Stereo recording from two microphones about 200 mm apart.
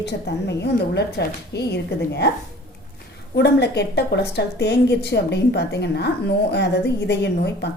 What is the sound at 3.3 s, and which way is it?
A woman's voice, 55° left (ahead or behind).